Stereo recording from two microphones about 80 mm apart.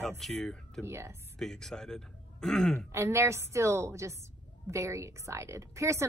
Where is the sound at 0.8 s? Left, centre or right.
Right.